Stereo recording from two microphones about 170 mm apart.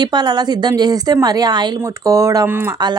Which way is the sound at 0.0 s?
25° right (ahead or behind).